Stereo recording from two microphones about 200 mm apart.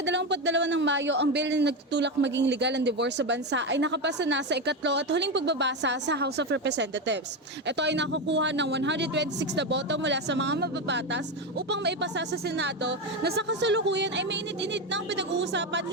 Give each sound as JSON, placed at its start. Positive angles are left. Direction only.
{"t": 0.0, "sound": "a man's voice", "side_deg": -60}